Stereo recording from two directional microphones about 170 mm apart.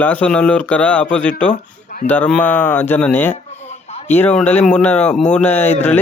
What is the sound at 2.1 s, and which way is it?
Speech, 5° left (ahead or behind).